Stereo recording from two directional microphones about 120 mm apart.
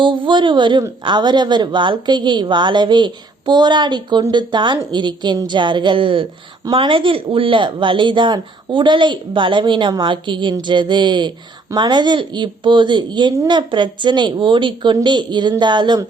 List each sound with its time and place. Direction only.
0.0 s a woman's voice: 45° right (ahead or behind)